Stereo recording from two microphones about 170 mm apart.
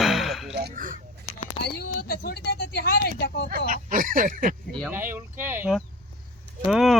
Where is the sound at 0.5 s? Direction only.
60° right (ahead or behind).